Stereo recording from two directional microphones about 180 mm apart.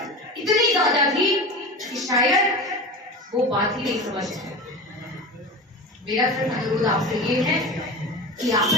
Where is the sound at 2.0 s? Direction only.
20° right (ahead or behind).